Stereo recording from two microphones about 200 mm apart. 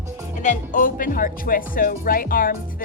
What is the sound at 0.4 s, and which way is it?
Speech, 40° left (ahead or behind).